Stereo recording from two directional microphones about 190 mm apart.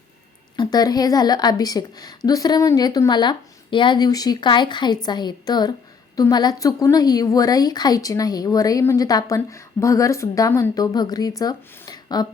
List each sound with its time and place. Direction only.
0.5 s a woman's voice: 20° left (ahead or behind)